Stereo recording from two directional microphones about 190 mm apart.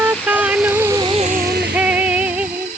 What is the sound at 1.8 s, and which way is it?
Music, 5° right (ahead or behind).